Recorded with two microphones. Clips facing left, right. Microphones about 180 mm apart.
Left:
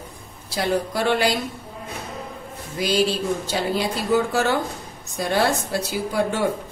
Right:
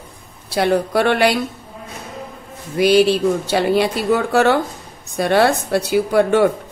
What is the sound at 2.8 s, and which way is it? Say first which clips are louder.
A woman's voice: right 8 dB; 65° right (ahead or behind).